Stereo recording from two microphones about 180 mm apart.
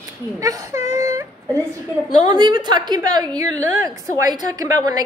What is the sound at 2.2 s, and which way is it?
A woman's voice, 25° right (ahead or behind).